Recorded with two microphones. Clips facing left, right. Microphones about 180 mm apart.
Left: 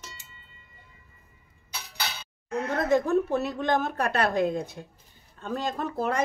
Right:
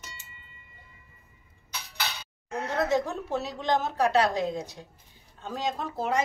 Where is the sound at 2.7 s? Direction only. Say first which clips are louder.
Left 4 dB; 55° left (ahead or behind).